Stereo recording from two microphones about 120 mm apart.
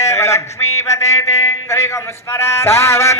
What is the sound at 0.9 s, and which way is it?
Music, 25° left (ahead or behind).